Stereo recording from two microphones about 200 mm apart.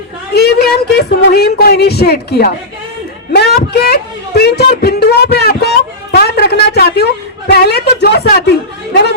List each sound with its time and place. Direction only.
0.3 s speech: 55° left (ahead or behind)